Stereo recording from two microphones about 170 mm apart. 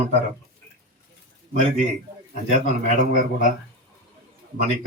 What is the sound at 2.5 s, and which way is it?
A man's voice, 50° right (ahead or behind).